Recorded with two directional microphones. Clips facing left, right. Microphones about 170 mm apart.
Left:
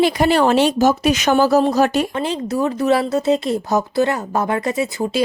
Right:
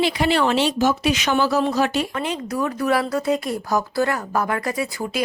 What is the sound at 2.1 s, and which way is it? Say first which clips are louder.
Speech: left 4 dB; 30° left (ahead or behind).